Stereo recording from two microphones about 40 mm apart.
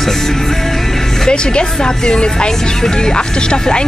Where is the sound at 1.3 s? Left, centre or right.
Centre.